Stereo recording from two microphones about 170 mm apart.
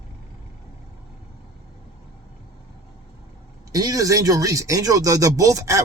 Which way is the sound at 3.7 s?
20° right (ahead or behind).